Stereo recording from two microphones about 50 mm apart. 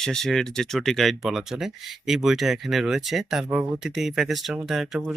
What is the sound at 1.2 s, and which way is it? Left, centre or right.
Speech, centre.